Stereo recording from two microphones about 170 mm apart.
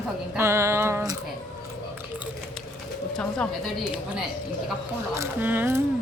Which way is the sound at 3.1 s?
5° left (ahead or behind).